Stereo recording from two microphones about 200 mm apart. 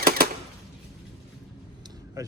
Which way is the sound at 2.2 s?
15° right (ahead or behind).